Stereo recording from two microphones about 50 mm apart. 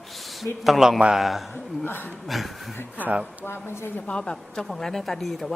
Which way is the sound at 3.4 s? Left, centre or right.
Left.